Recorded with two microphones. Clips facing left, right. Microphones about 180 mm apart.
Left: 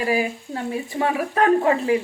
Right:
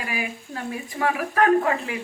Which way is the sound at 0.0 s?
30° left (ahead or behind).